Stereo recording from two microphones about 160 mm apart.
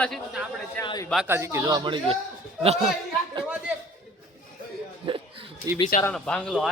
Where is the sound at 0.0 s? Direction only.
Centre (ahead or behind).